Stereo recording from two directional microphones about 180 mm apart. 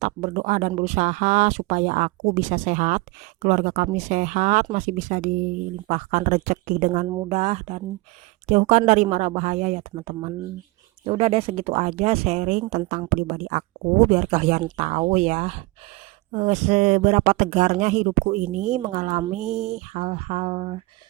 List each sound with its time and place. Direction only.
0.0 s speech: 40° right (ahead or behind)